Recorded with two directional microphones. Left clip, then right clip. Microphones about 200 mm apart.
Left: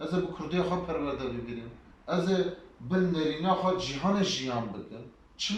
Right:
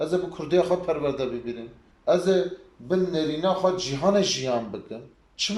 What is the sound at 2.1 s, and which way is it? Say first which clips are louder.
Speech: right 8 dB; 50° right (ahead or behind).